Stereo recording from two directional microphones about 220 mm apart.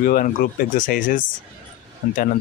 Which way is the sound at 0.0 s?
40° left (ahead or behind).